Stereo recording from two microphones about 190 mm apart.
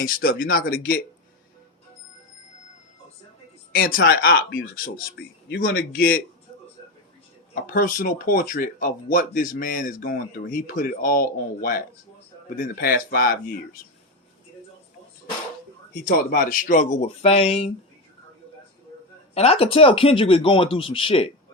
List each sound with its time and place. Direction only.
0.0 s speech: 50° left (ahead or behind)
3.8 s speech: 50° left (ahead or behind)
7.5 s speech: 50° left (ahead or behind)
16.0 s speech: 50° left (ahead or behind); by 17.7 s 30° left (ahead or behind)
19.3 s speech: 35° left (ahead or behind)